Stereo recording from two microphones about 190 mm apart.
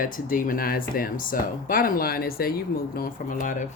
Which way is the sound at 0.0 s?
45° left (ahead or behind).